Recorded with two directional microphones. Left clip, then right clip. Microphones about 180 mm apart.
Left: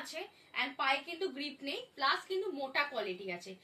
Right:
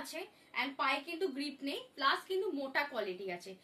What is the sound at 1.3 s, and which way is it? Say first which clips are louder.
A woman's voice: even; 25° right (ahead or behind).